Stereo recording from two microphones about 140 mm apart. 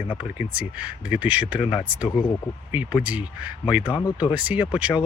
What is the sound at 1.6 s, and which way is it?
Speech, 35° left (ahead or behind).